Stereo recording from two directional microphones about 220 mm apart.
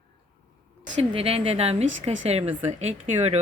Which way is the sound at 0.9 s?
30° right (ahead or behind).